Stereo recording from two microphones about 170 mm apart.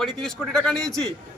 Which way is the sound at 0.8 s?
20° right (ahead or behind).